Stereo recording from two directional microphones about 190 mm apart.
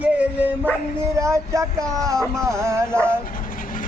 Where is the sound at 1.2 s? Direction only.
15° right (ahead or behind).